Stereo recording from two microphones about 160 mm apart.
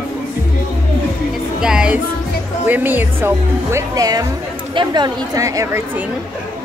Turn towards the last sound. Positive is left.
turn(degrees=-15)  # may be behind; listen again after turning